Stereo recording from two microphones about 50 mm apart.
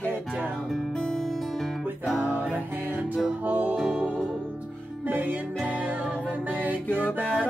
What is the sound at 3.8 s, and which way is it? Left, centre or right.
Music, centre.